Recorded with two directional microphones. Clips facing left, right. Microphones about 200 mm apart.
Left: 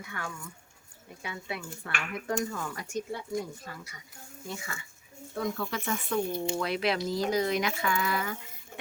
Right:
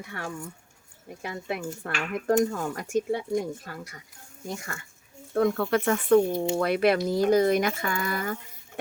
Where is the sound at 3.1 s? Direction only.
75° right (ahead or behind).